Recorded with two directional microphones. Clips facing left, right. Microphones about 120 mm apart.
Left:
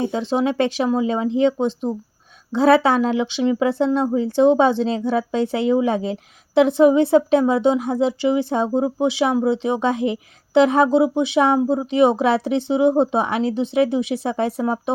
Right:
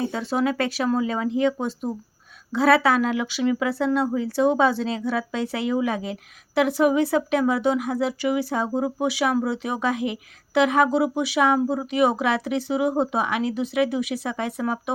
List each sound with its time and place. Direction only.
0.0 s speech: 25° left (ahead or behind)